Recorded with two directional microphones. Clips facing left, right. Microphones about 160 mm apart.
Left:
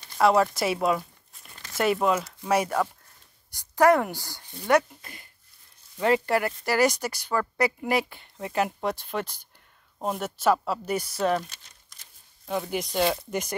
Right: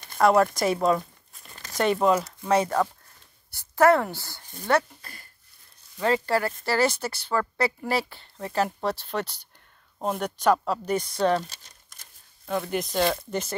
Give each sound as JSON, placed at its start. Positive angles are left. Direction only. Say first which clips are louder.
{"t": 0.2, "sound": "a woman's voice", "louder": "right 1 dB", "side_deg": 0}
{"t": 12.4, "sound": "speech", "louder": "right 1 dB", "side_deg": 10}